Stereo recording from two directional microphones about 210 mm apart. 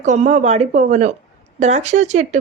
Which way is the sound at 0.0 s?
35° right (ahead or behind).